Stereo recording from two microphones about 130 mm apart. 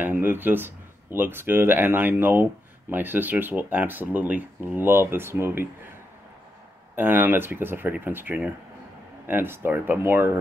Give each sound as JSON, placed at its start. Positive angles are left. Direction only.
{"t": 0.0, "sound": "speech", "side_deg": -15}
{"t": 7.0, "sound": "speech", "side_deg": -15}